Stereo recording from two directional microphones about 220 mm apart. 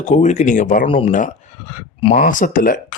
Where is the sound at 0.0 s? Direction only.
35° left (ahead or behind).